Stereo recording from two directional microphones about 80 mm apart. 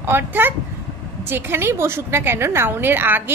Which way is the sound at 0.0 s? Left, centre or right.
Right.